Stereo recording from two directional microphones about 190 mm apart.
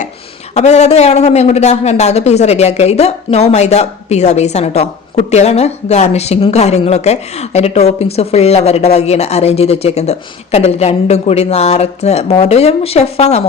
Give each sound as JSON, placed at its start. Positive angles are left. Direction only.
{"t": 0.5, "sound": "speech", "side_deg": 35}